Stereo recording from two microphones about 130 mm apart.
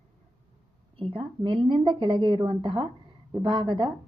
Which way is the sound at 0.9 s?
45° right (ahead or behind).